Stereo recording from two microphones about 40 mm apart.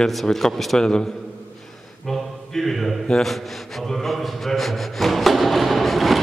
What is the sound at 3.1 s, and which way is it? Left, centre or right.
A man's voice, centre.